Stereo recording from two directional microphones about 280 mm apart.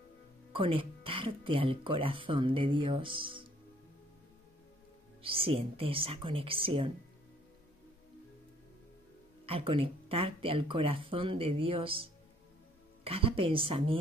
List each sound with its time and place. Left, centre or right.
0.5 s speech: centre
5.2 s speech: centre
9.5 s speech: centre